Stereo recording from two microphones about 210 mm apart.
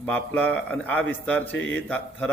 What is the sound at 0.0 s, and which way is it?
A man's voice, 5° left (ahead or behind).